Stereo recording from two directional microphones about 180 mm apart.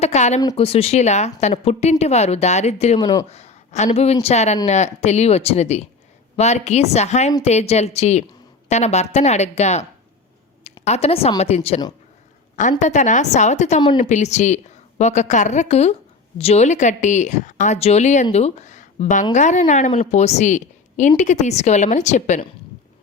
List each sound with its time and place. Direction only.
0.0 s a woman's voice: 40° left (ahead or behind)
3.2 s a sound: 35° left (ahead or behind)
3.9 s a woman's voice: 35° left (ahead or behind)
10.8 s a woman's voice: 35° left (ahead or behind)
12.8 s a woman's voice: 40° left (ahead or behind)